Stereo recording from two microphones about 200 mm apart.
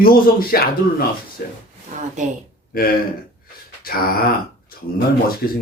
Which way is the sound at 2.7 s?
45° left (ahead or behind).